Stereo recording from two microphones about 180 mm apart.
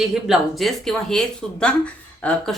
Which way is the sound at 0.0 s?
Centre (ahead or behind).